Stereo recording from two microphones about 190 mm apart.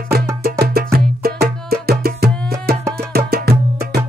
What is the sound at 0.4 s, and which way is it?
Music, 55° right (ahead or behind).